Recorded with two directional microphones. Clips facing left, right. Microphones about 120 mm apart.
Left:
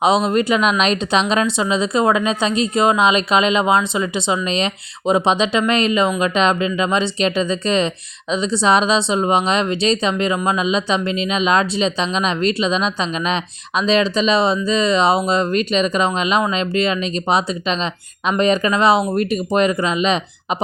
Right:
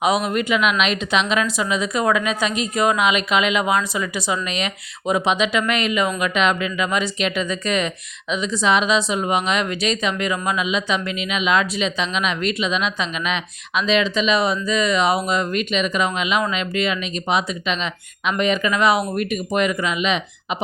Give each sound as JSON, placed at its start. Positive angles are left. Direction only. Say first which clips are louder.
{"t": 0.0, "sound": "a woman's voice", "louder": "left 4 dB", "side_deg": 25}